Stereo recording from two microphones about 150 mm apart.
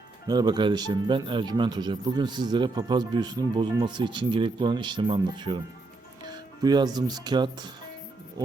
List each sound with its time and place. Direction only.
0.3 s speech: 25° right (ahead or behind)